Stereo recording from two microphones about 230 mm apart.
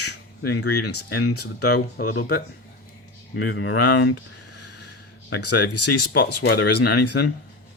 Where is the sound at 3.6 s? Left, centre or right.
Left.